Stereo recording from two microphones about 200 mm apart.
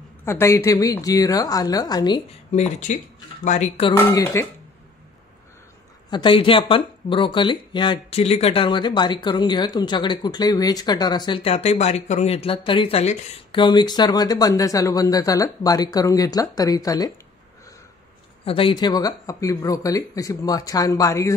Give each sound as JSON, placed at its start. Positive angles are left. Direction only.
{"t": 0.2, "sound": "speech", "side_deg": 15}
{"t": 2.5, "sound": "speech", "side_deg": 35}
{"t": 3.9, "sound": "speech", "side_deg": 15}
{"t": 6.0, "sound": "speech", "side_deg": 25}
{"t": 18.4, "sound": "speech", "side_deg": 25}